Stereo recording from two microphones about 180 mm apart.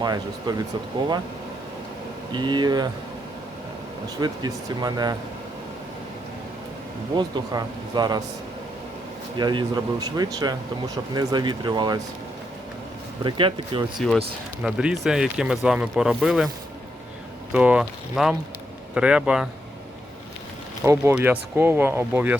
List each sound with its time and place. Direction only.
0.0 s speech: 25° right (ahead or behind)
2.3 s speech: 25° right (ahead or behind)
4.2 s speech: 20° right (ahead or behind)
7.2 s speech: 25° right (ahead or behind)
9.4 s speech: 25° right (ahead or behind)
13.2 s speech: 25° right (ahead or behind)
14.6 s speech: 5° right (ahead or behind)
17.5 s speech: 5° right (ahead or behind)
20.8 s speech: 15° right (ahead or behind)